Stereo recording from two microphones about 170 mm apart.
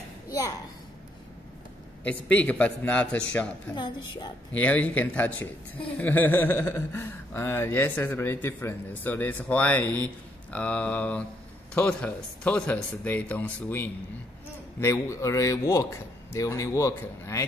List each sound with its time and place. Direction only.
2.3 s speech: 10° left (ahead or behind)
3.7 s speech: 25° left (ahead or behind)
4.5 s speech: 10° left (ahead or behind)